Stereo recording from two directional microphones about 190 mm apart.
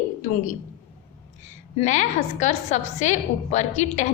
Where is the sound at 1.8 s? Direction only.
40° left (ahead or behind).